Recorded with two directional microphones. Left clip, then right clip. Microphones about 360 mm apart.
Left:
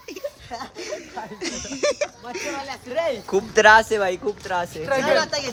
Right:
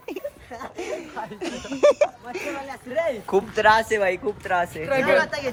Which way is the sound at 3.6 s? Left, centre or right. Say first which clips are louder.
Left 5 dB; left.